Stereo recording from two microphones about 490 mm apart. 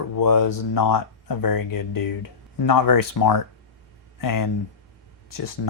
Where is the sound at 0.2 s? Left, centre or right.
Left.